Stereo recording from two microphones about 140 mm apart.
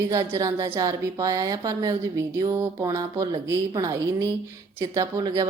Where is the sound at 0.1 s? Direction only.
20° right (ahead or behind).